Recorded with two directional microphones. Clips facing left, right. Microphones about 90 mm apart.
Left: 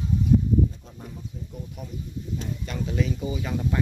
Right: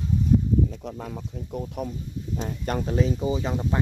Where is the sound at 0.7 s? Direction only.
90° right; by 1.9 s 60° right (ahead or behind).